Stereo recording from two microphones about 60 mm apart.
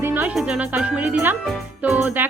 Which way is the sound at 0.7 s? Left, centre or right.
Right.